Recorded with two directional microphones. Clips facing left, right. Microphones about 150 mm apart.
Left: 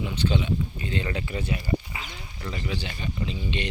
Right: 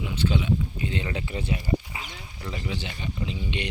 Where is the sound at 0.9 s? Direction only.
20° right (ahead or behind).